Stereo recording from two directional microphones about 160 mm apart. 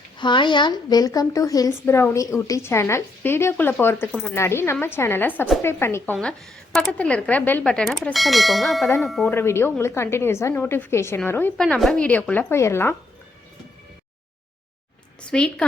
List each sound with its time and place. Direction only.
0.2 s a woman's voice: 30° left (ahead or behind)
6.1 s speech: centre (ahead or behind)
9.3 s a woman's voice: 15° left (ahead or behind)
11.6 s a woman's voice: centre (ahead or behind)
15.2 s a woman's voice: 5° left (ahead or behind)